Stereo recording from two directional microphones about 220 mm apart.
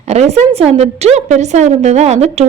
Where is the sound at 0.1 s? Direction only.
30° right (ahead or behind).